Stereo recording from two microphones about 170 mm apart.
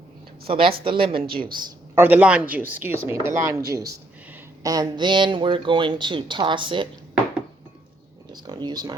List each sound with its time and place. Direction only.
0.4 s a woman's voice: 30° right (ahead or behind)
1.3 s speech: 60° right (ahead or behind)
2.0 s speech: 10° right (ahead or behind); by 6.8 s 30° right (ahead or behind)
8.3 s speech: 25° right (ahead or behind)